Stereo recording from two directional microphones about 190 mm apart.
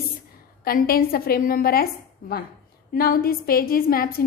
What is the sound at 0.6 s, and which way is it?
A woman's voice, 50° left (ahead or behind).